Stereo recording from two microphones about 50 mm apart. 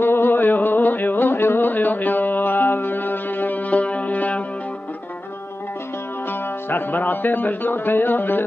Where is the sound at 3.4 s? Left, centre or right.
Left.